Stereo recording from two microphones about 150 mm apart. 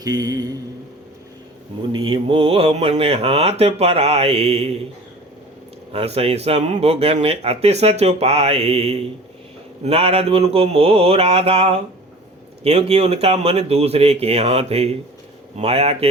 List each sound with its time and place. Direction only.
0.0 s mantra: 25° right (ahead or behind)
1.9 s speech: 35° right (ahead or behind)
5.9 s speech: 45° right (ahead or behind)